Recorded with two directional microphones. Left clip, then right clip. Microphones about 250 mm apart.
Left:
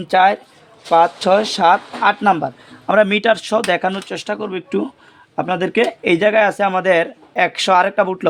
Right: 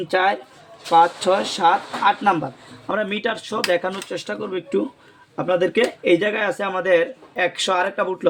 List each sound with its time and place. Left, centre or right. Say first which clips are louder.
0.1 s speech: left 7 dB; left